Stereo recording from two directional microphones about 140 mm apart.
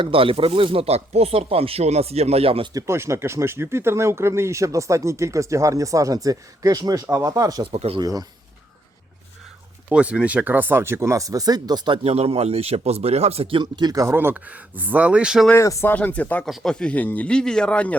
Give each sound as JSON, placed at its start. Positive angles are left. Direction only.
{"t": 0.0, "sound": "speech", "side_deg": -40}
{"t": 2.7, "sound": "speech", "side_deg": -20}
{"t": 7.7, "sound": "speech", "side_deg": -45}
{"t": 7.9, "sound": "speech", "side_deg": -25}
{"t": 9.9, "sound": "speech", "side_deg": -10}
{"t": 12.0, "sound": "speech", "side_deg": -45}
{"t": 15.5, "sound": "speech", "side_deg": 20}